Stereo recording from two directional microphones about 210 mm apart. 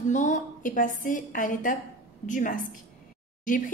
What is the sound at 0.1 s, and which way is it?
A woman's voice, 35° left (ahead or behind).